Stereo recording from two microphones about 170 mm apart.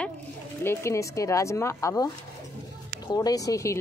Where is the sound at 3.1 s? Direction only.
20° left (ahead or behind).